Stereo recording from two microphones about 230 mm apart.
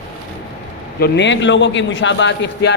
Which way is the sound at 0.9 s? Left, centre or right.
Left.